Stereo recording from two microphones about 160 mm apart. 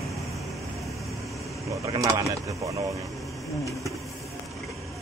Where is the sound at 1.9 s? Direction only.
20° right (ahead or behind).